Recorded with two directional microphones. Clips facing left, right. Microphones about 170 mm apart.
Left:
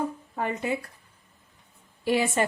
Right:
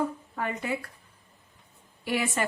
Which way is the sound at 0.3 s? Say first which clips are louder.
Left 3 dB; 25° left (ahead or behind).